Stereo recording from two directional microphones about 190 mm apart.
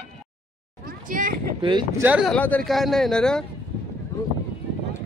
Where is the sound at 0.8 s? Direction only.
45° right (ahead or behind).